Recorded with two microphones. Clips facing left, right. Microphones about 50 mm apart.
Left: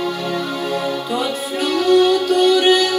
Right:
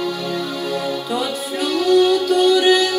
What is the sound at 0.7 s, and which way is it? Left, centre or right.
Music, left.